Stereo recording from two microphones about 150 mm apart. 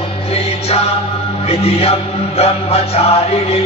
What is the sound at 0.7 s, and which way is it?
Music, 45° left (ahead or behind).